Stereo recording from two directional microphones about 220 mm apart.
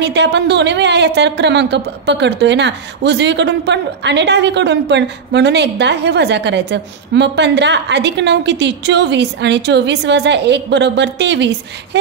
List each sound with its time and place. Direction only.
0.0 s a woman's voice: 50° right (ahead or behind)